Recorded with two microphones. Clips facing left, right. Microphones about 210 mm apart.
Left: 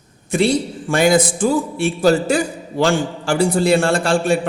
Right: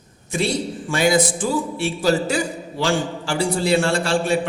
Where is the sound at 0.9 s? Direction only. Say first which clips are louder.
Left 4 dB; 55° left (ahead or behind).